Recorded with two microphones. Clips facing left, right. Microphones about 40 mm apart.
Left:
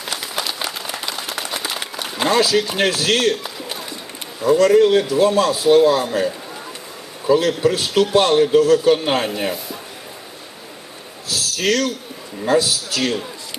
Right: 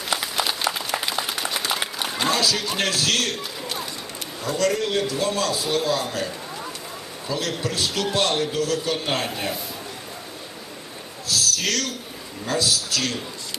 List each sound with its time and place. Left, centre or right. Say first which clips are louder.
0.2 s applause: even; centre
1.4 s applause: even; centre
2.1 s a man's voice: left 7 dB; centre
3.2 s a sound: left 8 dB; centre
4.4 s a man's voice: left 11 dB; centre
7.3 s a man's voice: left 11 dB; left
11.3 s a man's voice: left 4 dB; centre